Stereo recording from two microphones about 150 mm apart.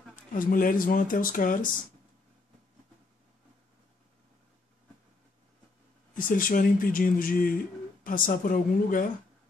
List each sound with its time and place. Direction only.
0.1 s speech: 65° left (ahead or behind)
6.1 s speech: 65° left (ahead or behind)